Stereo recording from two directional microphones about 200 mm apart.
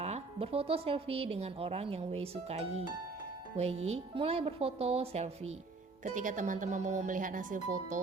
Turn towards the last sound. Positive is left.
turn(degrees=-40)  # may be behind; listen again after turning